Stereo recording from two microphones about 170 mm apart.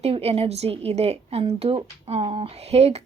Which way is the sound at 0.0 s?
35° right (ahead or behind).